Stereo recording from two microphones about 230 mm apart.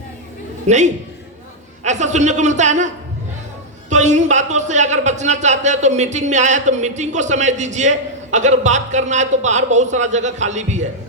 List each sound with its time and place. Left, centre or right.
0.7 s speech: right